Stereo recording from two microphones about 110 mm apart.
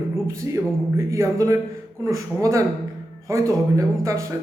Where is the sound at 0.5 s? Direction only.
25° right (ahead or behind).